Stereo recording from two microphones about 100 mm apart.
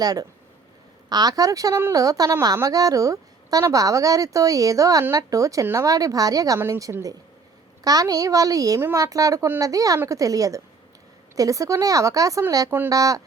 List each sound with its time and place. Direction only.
0.0 s a woman's voice: 40° right (ahead or behind)